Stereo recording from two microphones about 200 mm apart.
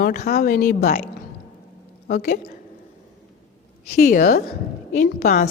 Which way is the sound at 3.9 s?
45° left (ahead or behind).